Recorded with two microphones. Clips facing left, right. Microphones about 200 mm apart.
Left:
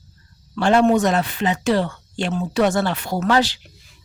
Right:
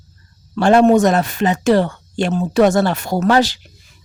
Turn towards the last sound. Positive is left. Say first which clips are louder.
# right 4 dB
turn(degrees=-45)  # may be behind; listen again after turning